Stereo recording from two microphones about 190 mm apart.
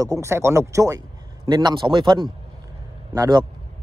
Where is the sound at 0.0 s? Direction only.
15° right (ahead or behind).